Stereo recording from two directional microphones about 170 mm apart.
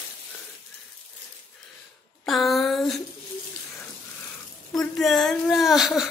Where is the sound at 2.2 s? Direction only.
Centre (ahead or behind).